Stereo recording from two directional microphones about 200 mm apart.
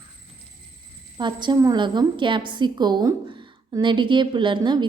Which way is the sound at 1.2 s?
20° right (ahead or behind).